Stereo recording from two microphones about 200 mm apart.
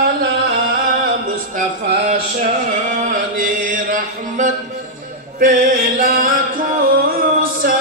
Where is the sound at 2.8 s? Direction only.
40° right (ahead or behind).